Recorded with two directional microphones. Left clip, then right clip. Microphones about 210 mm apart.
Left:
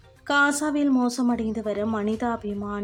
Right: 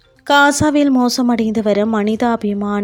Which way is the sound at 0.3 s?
35° right (ahead or behind).